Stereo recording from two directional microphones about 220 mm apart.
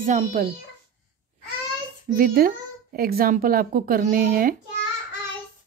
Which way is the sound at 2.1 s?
40° right (ahead or behind).